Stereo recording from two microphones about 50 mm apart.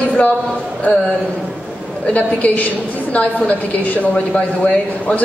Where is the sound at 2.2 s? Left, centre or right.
Left.